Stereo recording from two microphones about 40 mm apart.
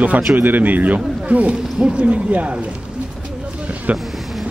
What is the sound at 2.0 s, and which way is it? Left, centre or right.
Speech, right.